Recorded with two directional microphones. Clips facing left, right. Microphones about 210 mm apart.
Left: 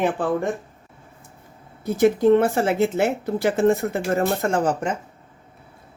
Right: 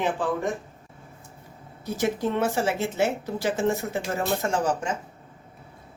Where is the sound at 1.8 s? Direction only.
55° left (ahead or behind).